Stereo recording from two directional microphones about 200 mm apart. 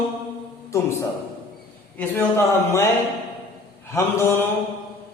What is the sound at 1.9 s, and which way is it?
Speech, 10° left (ahead or behind).